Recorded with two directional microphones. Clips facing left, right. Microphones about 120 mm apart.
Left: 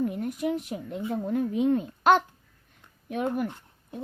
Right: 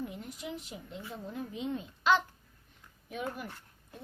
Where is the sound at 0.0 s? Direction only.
55° left (ahead or behind).